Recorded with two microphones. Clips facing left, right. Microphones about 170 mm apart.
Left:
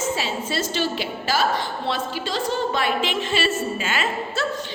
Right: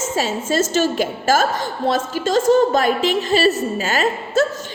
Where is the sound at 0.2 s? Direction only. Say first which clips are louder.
Right 7 dB; 45° right (ahead or behind).